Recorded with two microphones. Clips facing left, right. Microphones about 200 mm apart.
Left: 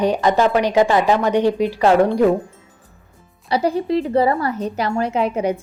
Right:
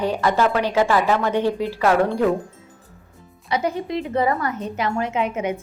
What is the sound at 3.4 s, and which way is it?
A woman's voice, 35° left (ahead or behind).